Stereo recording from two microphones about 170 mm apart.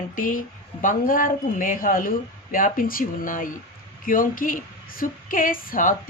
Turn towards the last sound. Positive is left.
turn(degrees=55)  # may be behind; listen again after turning